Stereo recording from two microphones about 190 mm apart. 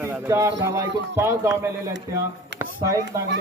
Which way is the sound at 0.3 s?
15° right (ahead or behind).